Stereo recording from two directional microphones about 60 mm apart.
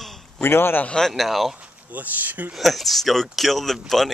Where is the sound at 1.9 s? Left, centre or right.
Right.